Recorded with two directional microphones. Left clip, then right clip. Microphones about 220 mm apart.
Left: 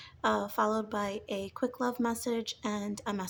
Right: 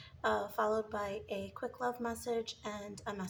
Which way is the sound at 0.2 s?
50° left (ahead or behind).